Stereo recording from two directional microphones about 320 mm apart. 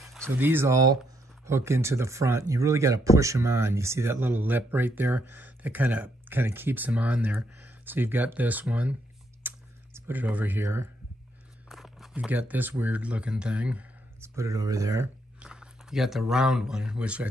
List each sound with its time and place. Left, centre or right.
0.0 s speech: centre
9.4 s clicking: centre
9.9 s speech: centre